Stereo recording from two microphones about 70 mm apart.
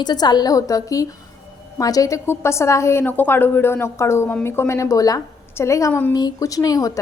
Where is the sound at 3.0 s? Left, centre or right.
Left.